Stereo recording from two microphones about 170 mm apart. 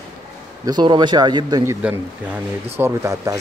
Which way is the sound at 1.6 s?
10° right (ahead or behind).